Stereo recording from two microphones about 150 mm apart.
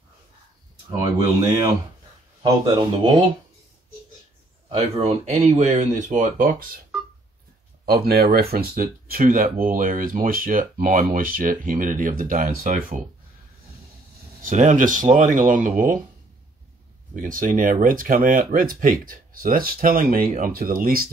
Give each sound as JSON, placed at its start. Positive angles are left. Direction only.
{"t": 2.4, "sound": "speech", "side_deg": -25}
{"t": 4.7, "sound": "speech", "side_deg": -45}
{"t": 7.8, "sound": "speech", "side_deg": -90}
{"t": 14.4, "sound": "speech", "side_deg": -55}
{"t": 17.1, "sound": "speech", "side_deg": -65}